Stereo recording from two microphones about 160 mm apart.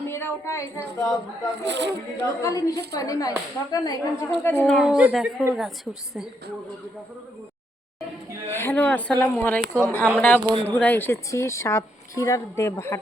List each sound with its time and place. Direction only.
0.1 s a woman's voice: 15° left (ahead or behind)
1.6 s speech: 90° right
2.2 s a woman's voice: 20° left (ahead or behind); by 6.2 s centre (ahead or behind)
8.4 s a woman's voice: 15° left (ahead or behind)